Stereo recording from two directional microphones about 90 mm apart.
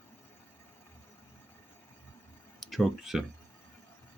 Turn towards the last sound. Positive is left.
turn(degrees=-5)  # may be behind; listen again after turning